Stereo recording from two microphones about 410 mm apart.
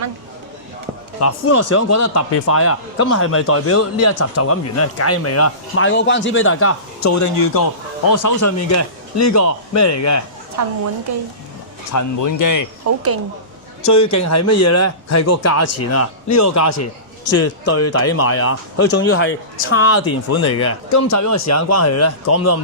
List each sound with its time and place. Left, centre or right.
1.2 s a man's voice: left
11.9 s speech: left
12.8 s speech: right
13.8 s a man's voice: left